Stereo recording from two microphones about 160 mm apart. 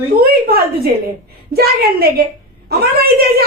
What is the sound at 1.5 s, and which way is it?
Speech, 75° right (ahead or behind).